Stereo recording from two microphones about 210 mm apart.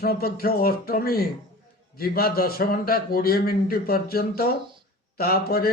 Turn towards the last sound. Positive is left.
turn(degrees=45)  # may be behind; listen again after turning